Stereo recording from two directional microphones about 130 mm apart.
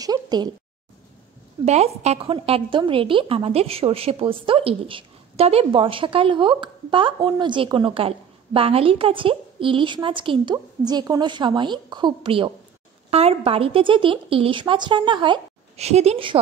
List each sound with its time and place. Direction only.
0.0 s a woman's voice: 30° right (ahead or behind)
1.6 s a woman's voice: 55° right (ahead or behind); by 15.4 s 40° right (ahead or behind)
15.7 s a woman's voice: 55° right (ahead or behind)